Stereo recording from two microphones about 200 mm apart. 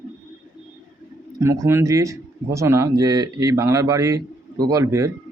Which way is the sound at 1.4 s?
15° right (ahead or behind).